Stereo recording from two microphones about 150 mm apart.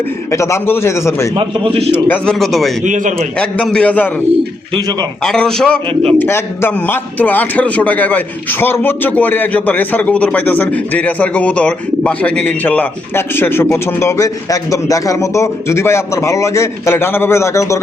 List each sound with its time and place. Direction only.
0.3 s a man's voice: 20° left (ahead or behind)
1.4 s a man's voice: 40° right (ahead or behind)
1.9 s a man's voice: 10° left (ahead or behind)
2.4 s a man's voice: centre (ahead or behind)
2.8 s a man's voice: 55° right (ahead or behind)
3.2 s a man's voice: 5° left (ahead or behind)
5.2 s a man's voice: 5° left (ahead or behind)
5.9 s a man's voice: 40° right (ahead or behind)
6.1 s a man's voice: 15° left (ahead or behind)